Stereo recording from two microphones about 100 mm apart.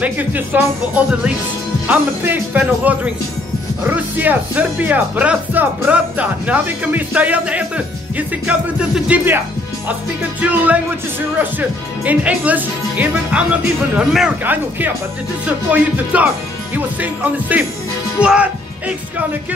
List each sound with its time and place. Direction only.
0.0 s speech: 20° right (ahead or behind)
1.9 s speech: 20° right (ahead or behind)
10.4 s speech: 15° right (ahead or behind)
18.2 s music: 10° right (ahead or behind)